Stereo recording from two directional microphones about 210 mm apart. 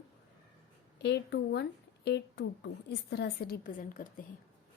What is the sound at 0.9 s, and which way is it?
A woman's voice, 55° left (ahead or behind).